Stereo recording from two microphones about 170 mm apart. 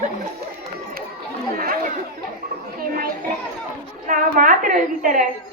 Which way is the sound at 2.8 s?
60° right (ahead or behind).